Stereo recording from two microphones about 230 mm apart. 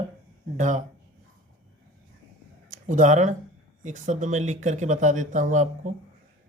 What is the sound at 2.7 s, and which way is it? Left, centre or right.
Speech, right.